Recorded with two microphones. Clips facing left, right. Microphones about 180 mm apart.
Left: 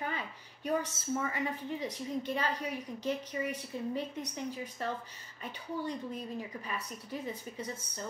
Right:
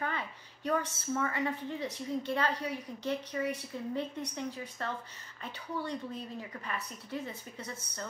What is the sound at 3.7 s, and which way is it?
A woman's voice, 15° left (ahead or behind).